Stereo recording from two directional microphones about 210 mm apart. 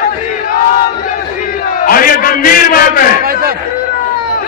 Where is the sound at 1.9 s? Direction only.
45° left (ahead or behind).